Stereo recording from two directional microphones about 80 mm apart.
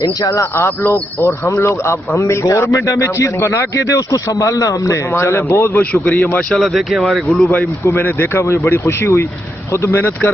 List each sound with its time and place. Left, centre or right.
0.5 s speech: left
5.8 s speech: centre
6.5 s speech: centre
7.3 s speech: centre; by 10.1 s left